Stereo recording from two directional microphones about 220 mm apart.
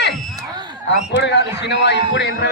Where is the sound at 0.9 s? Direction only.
50° left (ahead or behind).